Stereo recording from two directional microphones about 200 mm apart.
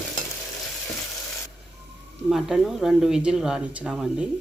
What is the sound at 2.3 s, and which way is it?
Speech, centre (ahead or behind).